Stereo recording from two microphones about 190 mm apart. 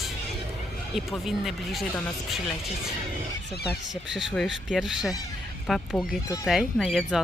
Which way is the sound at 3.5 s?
55° left (ahead or behind).